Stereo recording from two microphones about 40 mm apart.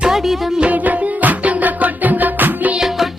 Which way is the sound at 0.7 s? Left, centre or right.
Right.